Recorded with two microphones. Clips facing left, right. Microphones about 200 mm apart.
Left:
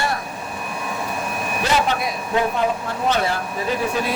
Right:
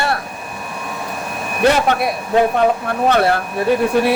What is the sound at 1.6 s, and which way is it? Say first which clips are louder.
Speech: right 7 dB; 60° right (ahead or behind).